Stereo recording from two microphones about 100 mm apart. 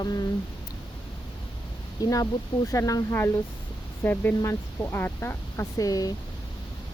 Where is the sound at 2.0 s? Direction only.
40° left (ahead or behind).